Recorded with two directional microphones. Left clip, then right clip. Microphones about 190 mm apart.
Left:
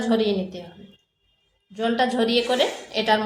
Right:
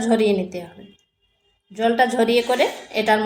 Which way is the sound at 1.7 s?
25° right (ahead or behind).